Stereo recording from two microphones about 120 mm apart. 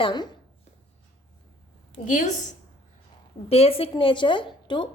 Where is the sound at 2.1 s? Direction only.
90° left.